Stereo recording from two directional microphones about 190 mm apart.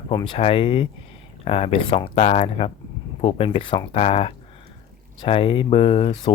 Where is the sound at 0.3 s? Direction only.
30° left (ahead or behind).